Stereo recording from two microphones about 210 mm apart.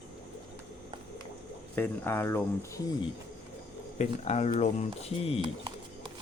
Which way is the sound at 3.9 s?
30° left (ahead or behind).